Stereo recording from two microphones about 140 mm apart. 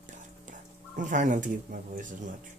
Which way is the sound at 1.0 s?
65° right (ahead or behind).